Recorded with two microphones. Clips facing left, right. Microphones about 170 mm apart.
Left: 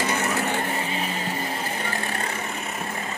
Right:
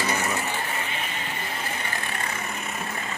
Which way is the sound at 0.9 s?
35° left (ahead or behind).